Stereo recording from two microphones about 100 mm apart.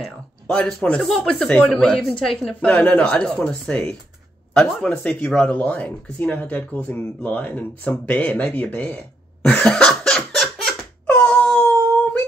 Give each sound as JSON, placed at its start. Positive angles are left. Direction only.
{"t": 0.0, "sound": "a woman's voice", "side_deg": 5}
{"t": 9.4, "sound": "laughter", "side_deg": 10}
{"t": 11.1, "sound": "wail", "side_deg": 15}